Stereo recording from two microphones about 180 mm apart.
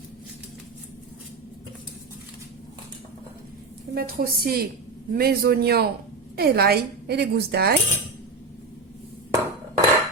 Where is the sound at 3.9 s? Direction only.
55° right (ahead or behind).